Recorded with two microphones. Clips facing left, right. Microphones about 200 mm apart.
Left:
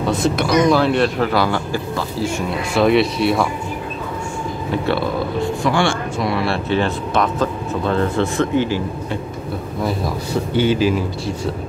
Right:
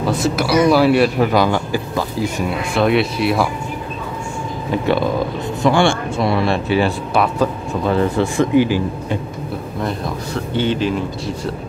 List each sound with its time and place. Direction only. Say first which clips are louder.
0.0 s speech: even; 5° right (ahead or behind)
2.7 s speech: left 2 dB; centre (ahead or behind)
4.8 s speech: right 4 dB; 15° right (ahead or behind)
9.8 s speech: left 2 dB; 5° left (ahead or behind)